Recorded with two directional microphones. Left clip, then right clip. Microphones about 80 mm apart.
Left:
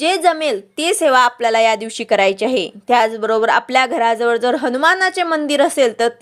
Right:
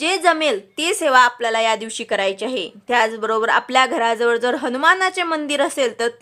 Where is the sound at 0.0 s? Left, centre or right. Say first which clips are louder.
Left 2 dB; left.